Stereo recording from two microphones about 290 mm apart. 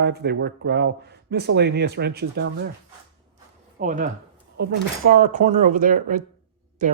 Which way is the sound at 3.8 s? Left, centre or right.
Right.